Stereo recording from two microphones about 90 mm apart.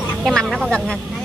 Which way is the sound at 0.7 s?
5° left (ahead or behind).